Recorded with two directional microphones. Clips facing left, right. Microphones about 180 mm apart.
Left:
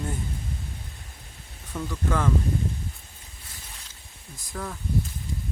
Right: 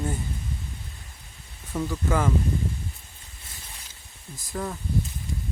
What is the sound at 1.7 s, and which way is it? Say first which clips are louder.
Speech: right 2 dB; 10° right (ahead or behind).